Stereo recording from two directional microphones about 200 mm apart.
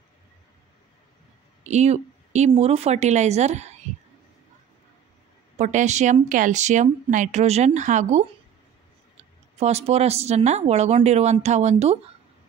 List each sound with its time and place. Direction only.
1.6 s speech: 35° right (ahead or behind)
5.6 s a woman's voice: 35° right (ahead or behind)
9.6 s a woman's voice: 35° right (ahead or behind)